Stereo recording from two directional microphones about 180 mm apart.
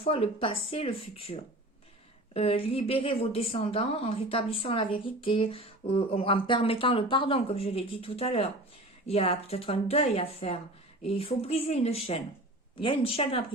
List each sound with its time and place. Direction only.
0.0 s a woman's voice: 30° left (ahead or behind)